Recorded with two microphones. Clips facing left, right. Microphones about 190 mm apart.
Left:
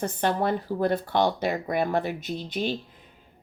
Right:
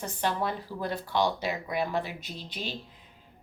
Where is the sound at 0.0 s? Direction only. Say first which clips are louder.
Left 5 dB; 55° left (ahead or behind).